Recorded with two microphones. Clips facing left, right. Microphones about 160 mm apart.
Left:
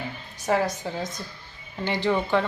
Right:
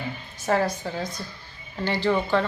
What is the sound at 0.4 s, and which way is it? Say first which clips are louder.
A woman's voice: right 1 dB; 15° left (ahead or behind).